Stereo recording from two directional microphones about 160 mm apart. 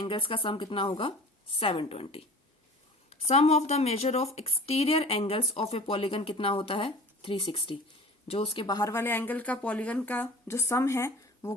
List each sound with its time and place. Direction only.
0.0 s a woman's voice: 30° left (ahead or behind)
8.6 s speech: 20° left (ahead or behind)